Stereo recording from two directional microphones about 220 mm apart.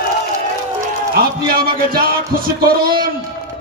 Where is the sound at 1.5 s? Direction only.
45° right (ahead or behind).